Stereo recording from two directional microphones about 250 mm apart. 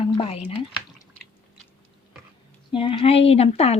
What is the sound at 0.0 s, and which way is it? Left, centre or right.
Speech, left.